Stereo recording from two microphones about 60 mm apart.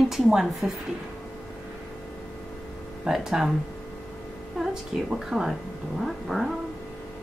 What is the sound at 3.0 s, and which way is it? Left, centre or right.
Speech, centre.